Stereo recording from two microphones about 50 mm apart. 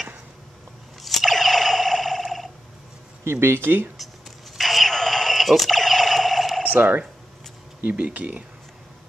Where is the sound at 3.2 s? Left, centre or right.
Right.